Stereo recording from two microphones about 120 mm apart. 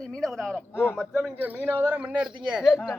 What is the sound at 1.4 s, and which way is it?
Speech, 15° right (ahead or behind).